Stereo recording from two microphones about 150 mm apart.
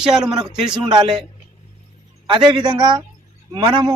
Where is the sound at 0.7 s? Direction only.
30° right (ahead or behind).